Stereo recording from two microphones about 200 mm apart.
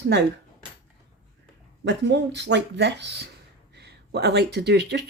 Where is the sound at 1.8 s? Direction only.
60° right (ahead or behind).